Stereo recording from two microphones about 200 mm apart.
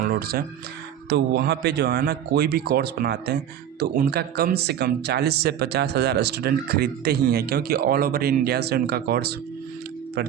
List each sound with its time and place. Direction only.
0.0 s music: 50° right (ahead or behind)
1.1 s speech: 55° right (ahead or behind)